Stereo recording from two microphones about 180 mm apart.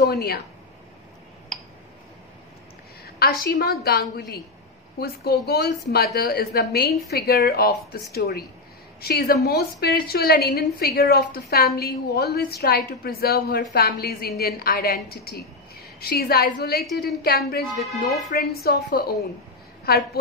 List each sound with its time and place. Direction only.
0.0 s a woman's voice: 60° left (ahead or behind)
3.2 s a woman's voice: 60° left (ahead or behind)
17.7 s speech: centre (ahead or behind)
18.3 s a woman's voice: 60° left (ahead or behind)